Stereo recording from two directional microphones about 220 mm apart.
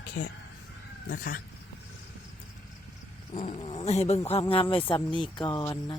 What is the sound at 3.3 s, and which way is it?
Speech, 30° left (ahead or behind).